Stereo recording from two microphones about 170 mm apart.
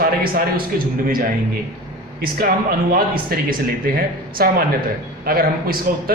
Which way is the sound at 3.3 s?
60° right (ahead or behind).